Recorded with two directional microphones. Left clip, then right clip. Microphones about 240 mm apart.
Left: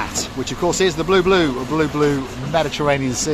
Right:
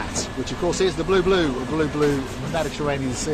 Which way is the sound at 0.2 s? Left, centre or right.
Left.